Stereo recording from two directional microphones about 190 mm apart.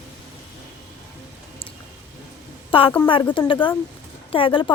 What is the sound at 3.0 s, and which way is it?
Speech, 25° left (ahead or behind).